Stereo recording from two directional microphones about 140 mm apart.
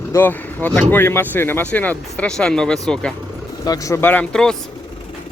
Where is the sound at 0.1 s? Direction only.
15° left (ahead or behind).